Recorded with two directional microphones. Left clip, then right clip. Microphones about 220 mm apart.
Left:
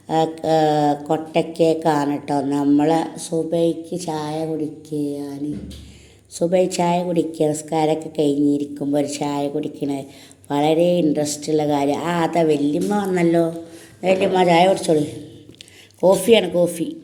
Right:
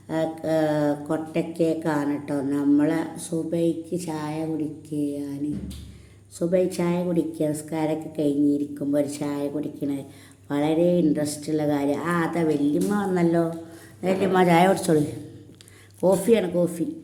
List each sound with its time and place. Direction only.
0.1 s speech: 5° left (ahead or behind)
6.5 s a woman's voice: 5° left (ahead or behind); by 15.1 s 30° right (ahead or behind)
16.3 s speech: 10° right (ahead or behind)